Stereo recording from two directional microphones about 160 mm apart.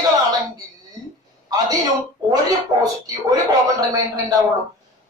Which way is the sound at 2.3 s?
25° right (ahead or behind).